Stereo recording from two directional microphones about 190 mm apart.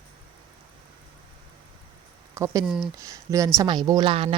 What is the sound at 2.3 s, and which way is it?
Speech, 15° right (ahead or behind).